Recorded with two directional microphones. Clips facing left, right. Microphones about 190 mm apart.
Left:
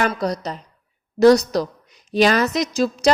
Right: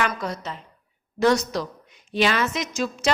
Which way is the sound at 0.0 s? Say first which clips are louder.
Left 5 dB; 35° left (ahead or behind).